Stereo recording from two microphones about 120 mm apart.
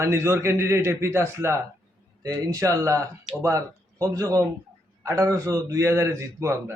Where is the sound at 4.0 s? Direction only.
25° right (ahead or behind).